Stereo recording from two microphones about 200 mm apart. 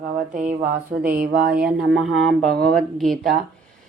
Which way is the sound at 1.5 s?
5° right (ahead or behind).